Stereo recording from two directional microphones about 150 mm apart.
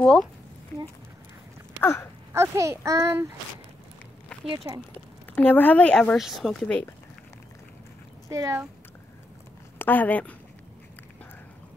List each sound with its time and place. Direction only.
0.0 s speech: 5° left (ahead or behind)
0.7 s speech: 20° left (ahead or behind)
1.8 s a sound: 15° left (ahead or behind)
2.3 s a child's voice: 20° right (ahead or behind)
4.5 s a child's voice: 30° right (ahead or behind)
5.3 s speech: 10° left (ahead or behind)
8.3 s a child's voice: 20° right (ahead or behind)
9.8 s speech: 10° left (ahead or behind)